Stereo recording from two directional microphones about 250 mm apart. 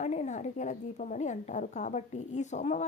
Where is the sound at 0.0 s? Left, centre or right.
Left.